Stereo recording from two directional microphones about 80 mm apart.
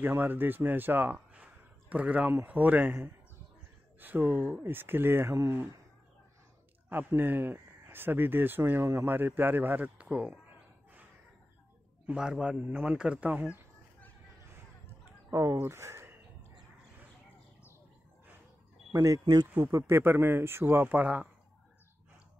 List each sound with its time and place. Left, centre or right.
0.0 s speech: right
1.1 s a sound: centre
2.4 s speech: centre
6.9 s speech: right
12.1 s a man's voice: centre
15.5 s speech: right
18.9 s speech: right
19.9 s speech: right